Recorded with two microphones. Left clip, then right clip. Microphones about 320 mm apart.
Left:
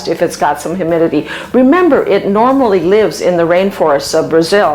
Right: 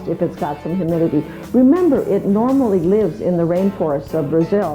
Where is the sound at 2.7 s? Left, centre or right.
Centre.